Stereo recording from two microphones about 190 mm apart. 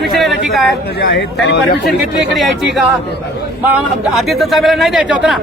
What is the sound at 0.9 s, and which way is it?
Speech, 65° left (ahead or behind).